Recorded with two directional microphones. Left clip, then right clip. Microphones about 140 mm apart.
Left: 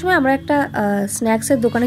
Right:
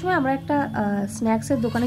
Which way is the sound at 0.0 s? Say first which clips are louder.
Left 6 dB; 25° left (ahead or behind).